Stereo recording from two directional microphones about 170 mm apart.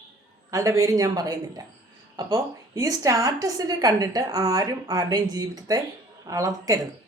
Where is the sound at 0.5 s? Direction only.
20° right (ahead or behind).